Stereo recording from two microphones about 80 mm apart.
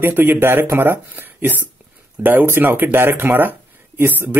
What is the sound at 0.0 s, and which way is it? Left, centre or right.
Speech, right.